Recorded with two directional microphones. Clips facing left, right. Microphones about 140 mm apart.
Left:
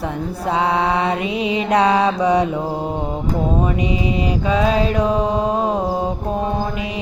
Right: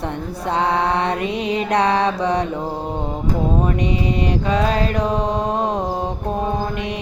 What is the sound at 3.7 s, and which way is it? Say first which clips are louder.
Mantra: even; 5° left (ahead or behind).